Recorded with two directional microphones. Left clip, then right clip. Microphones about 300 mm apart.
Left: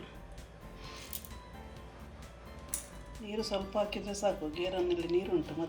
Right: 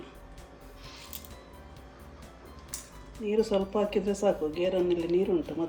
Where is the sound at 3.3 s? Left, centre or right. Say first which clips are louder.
Right 9 dB; centre.